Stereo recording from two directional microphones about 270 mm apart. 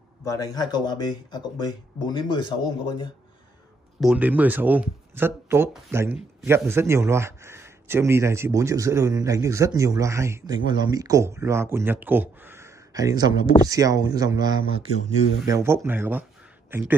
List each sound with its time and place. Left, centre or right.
0.2 s speech: centre
4.0 s a man's voice: centre